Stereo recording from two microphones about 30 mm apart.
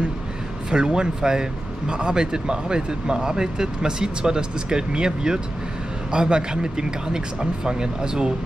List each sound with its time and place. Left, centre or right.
0.7 s speech: right